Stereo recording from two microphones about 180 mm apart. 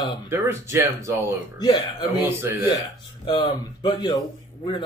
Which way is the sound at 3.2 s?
20° left (ahead or behind).